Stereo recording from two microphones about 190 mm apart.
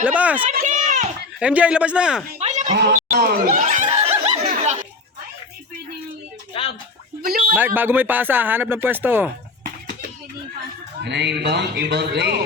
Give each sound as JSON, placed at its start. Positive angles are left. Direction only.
{"t": 0.0, "sound": "speech", "side_deg": -5}
{"t": 0.4, "sound": "run", "side_deg": -45}
{"t": 1.4, "sound": "speech", "side_deg": -5}
{"t": 2.4, "sound": "a sound", "side_deg": -40}
{"t": 2.7, "sound": "snicker", "side_deg": -60}
{"t": 6.5, "sound": "a sound", "side_deg": 30}
{"t": 7.2, "sound": "a sound", "side_deg": -50}
{"t": 7.5, "sound": "speech", "side_deg": -10}
{"t": 11.0, "sound": "speech", "side_deg": -65}